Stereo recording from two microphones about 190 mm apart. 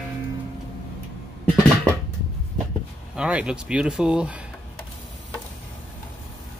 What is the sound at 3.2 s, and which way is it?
Speech, 5° right (ahead or behind).